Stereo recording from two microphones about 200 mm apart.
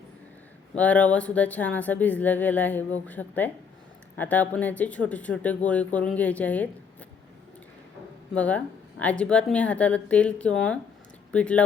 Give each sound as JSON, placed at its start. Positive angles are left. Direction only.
{"t": 0.8, "sound": "speech", "side_deg": 5}
{"t": 8.4, "sound": "speech", "side_deg": 5}